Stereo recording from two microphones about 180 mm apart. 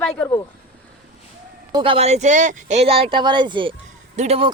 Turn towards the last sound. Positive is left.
turn(degrees=-35)  # may be behind; listen again after turning